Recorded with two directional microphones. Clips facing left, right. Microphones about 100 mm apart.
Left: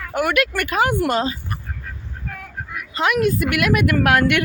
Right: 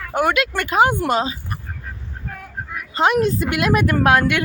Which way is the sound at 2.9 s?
30° right (ahead or behind).